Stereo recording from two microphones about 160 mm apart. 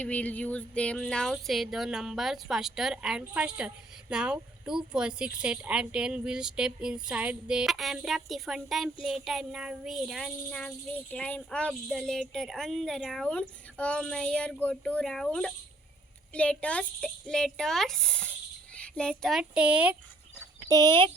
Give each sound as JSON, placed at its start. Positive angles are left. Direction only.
{"t": 0.0, "sound": "child singing", "side_deg": 10}
{"t": 20.7, "sound": "speech", "side_deg": -25}